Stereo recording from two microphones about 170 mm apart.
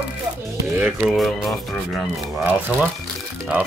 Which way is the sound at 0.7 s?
5° right (ahead or behind).